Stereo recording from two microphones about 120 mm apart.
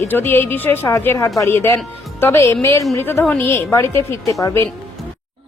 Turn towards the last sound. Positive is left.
turn(degrees=25)  # may be behind; listen again after turning